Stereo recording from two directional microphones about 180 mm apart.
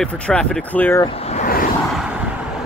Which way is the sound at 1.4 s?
55° left (ahead or behind).